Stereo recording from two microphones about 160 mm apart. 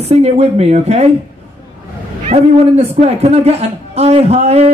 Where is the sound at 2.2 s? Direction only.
40° right (ahead or behind).